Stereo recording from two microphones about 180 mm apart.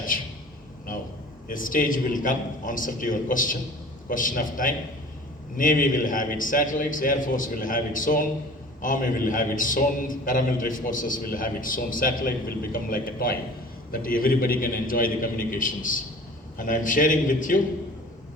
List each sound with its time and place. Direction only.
1.5 s a man's voice: 50° left (ahead or behind)